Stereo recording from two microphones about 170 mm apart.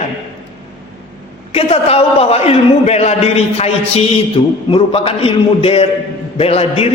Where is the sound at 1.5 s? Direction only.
35° left (ahead or behind).